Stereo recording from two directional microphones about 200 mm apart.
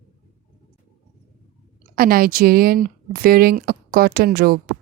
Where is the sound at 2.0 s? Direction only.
45° right (ahead or behind).